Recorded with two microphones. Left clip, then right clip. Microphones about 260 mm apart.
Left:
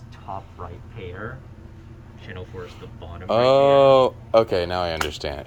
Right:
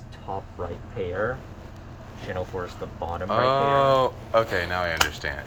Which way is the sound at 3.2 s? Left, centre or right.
Left.